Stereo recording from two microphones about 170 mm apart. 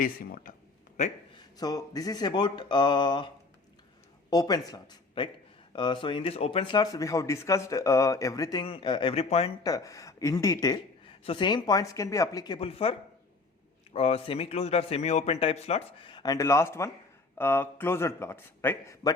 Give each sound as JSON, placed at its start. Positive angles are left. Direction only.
{"t": 0.0, "sound": "speech", "side_deg": 55}
{"t": 1.3, "sound": "a man's voice", "side_deg": 25}
{"t": 4.3, "sound": "a man's voice", "side_deg": 20}
{"t": 9.6, "sound": "a man's voice", "side_deg": 20}
{"t": 12.5, "sound": "a man's voice", "side_deg": 35}